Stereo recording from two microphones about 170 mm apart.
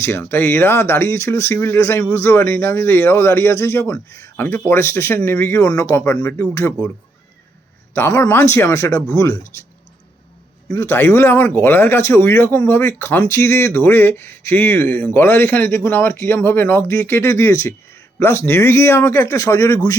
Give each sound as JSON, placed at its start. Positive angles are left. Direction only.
{"t": 0.0, "sound": "speech", "side_deg": 15}
{"t": 7.9, "sound": "speech", "side_deg": 15}
{"t": 10.7, "sound": "speech", "side_deg": 15}